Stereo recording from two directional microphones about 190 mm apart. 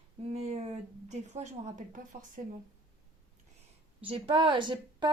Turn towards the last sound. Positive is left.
turn(degrees=-25)  # may be behind; listen again after turning